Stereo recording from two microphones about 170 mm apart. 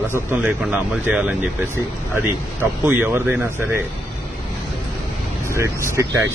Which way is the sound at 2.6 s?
10° right (ahead or behind).